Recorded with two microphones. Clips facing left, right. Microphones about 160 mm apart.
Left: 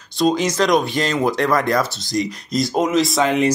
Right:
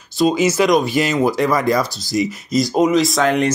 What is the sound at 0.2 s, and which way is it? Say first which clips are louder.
Speech: right 2 dB; 5° right (ahead or behind).